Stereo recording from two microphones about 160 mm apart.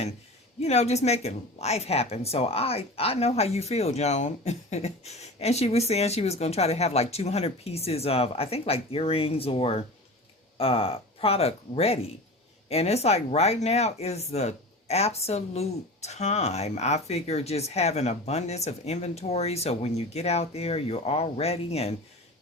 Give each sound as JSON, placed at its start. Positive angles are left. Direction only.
{"t": 0.6, "sound": "speech", "side_deg": 45}